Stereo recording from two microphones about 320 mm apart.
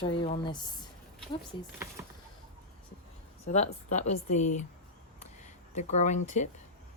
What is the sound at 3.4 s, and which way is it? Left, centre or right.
Speech, left.